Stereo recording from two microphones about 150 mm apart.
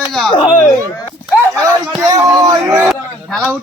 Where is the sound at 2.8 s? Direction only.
5° right (ahead or behind).